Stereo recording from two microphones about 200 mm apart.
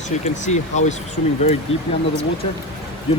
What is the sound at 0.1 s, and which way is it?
Speech, 35° left (ahead or behind).